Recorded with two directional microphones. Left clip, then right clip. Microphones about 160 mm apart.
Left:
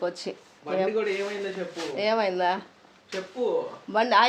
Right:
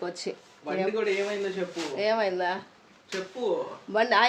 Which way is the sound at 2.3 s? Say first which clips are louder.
Left 3 dB; 55° left (ahead or behind).